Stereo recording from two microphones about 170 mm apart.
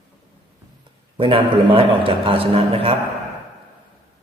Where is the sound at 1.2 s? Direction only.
30° right (ahead or behind).